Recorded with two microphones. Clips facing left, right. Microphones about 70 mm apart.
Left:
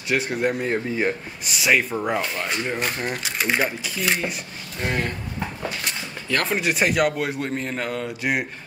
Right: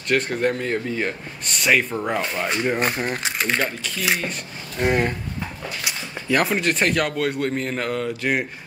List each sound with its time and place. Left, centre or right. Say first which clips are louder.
0.1 s speech: right 2 dB; centre
2.4 s speech: right 4 dB; centre
3.3 s speech: left 3 dB; centre
4.7 s speech: right 5 dB; centre
5.9 s a sound: right 3 dB; centre
6.4 s speech: left 2 dB; centre